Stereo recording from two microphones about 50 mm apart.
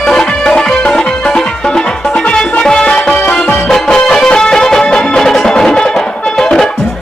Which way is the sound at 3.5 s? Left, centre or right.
Centre.